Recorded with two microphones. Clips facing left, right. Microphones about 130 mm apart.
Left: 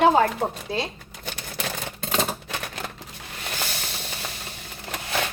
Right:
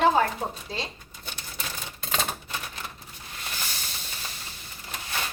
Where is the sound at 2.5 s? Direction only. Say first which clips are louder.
Left 4 dB; 80° left.